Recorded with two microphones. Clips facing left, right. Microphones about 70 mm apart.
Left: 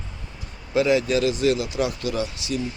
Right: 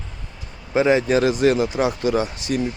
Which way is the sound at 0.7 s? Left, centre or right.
Right.